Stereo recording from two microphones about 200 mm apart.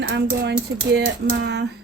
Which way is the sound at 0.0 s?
70° right (ahead or behind).